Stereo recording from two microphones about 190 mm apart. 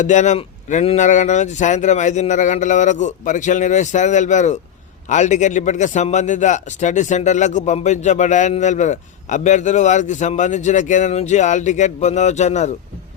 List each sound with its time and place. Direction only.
0.0 s a man's voice: 40° left (ahead or behind)